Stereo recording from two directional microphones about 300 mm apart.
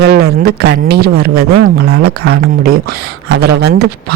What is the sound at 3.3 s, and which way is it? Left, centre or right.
Speech, right.